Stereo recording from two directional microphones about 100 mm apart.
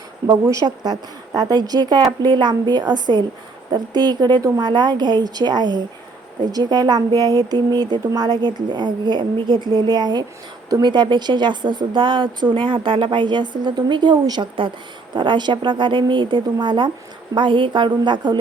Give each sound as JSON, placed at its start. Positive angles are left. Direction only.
{"t": 0.3, "sound": "speech", "side_deg": -40}